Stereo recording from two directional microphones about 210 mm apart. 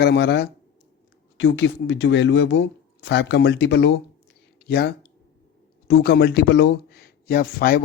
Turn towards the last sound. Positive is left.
turn(degrees=45)  # may be behind; listen again after turning